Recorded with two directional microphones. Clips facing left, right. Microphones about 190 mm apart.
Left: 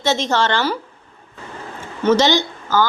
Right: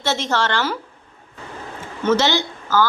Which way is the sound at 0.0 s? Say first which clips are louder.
Left 3 dB; 15° left (ahead or behind).